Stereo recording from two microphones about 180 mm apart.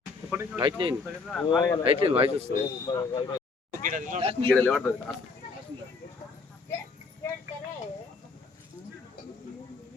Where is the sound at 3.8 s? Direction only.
45° right (ahead or behind).